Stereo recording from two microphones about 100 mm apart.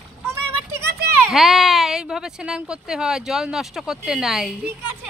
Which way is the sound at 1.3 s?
Centre (ahead or behind).